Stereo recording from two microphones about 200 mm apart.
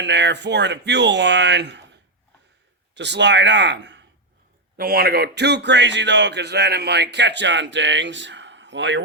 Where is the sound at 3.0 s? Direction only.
60° right (ahead or behind).